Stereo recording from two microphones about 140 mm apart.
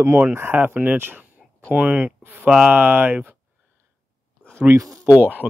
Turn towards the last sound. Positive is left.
turn(degrees=-10)  # may be behind; listen again after turning